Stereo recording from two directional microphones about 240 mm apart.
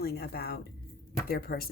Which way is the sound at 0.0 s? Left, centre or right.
Left.